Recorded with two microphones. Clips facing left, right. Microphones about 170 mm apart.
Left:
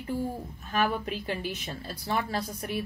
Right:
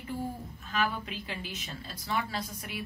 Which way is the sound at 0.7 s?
50° left (ahead or behind).